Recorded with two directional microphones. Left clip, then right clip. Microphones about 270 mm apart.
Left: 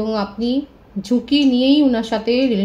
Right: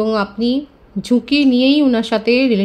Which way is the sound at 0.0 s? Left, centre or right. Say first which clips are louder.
Right 4 dB; right.